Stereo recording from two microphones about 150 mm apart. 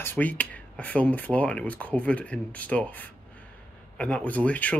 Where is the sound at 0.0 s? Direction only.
10° left (ahead or behind).